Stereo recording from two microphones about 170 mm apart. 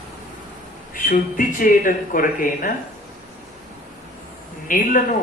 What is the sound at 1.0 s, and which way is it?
Speech, 55° left (ahead or behind).